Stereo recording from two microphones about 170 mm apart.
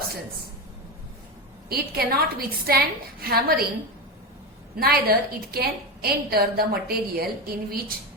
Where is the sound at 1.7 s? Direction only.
65° right (ahead or behind).